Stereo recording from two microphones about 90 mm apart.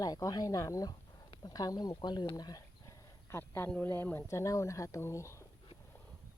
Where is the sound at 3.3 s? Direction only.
25° left (ahead or behind).